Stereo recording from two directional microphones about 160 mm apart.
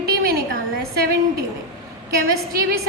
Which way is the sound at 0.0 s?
70° right (ahead or behind).